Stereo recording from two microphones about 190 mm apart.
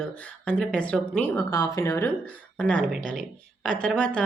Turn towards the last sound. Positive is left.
turn(degrees=5)  # may be behind; listen again after turning